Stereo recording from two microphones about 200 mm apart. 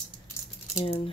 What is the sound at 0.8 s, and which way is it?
Speech, 30° left (ahead or behind).